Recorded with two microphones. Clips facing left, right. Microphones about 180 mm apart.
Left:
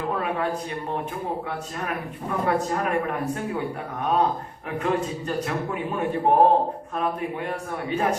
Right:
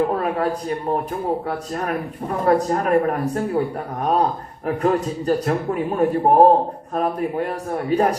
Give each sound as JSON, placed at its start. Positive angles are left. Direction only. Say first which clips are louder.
{"t": 0.1, "sound": "a man's voice", "louder": "right 4 dB", "side_deg": -40}